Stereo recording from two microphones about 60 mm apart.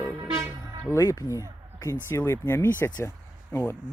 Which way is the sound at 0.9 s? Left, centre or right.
Left.